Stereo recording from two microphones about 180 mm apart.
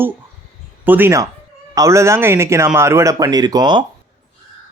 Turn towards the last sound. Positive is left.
turn(degrees=-25)  # may be behind; listen again after turning